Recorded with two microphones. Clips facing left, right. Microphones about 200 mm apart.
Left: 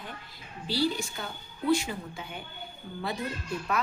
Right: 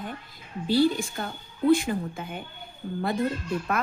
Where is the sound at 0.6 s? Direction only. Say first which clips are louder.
Right 7 dB; 50° right (ahead or behind).